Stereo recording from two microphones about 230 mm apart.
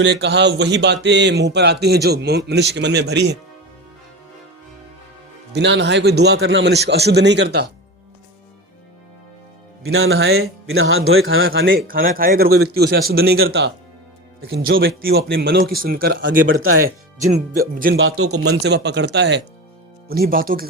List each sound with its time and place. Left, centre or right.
0.0 s a man's voice: right
5.5 s a man's voice: right
10.0 s a man's voice: right
10.7 s speech: right
11.4 s a man's voice: right
11.9 s a man's voice: right
17.9 s speech: right
18.4 s a man's voice: right